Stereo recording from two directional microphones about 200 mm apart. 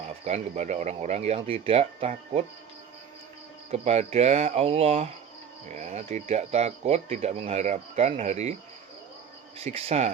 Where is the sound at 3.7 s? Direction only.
30° right (ahead or behind).